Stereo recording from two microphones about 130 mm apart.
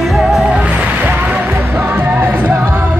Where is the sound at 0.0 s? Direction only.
Centre (ahead or behind).